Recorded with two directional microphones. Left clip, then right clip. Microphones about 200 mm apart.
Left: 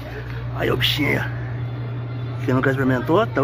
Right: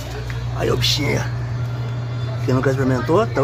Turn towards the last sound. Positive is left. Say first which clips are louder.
# right 1 dB
turn(degrees=0)  # may be behind; listen again after turning